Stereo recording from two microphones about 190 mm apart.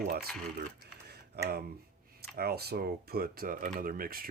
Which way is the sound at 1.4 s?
55° right (ahead or behind).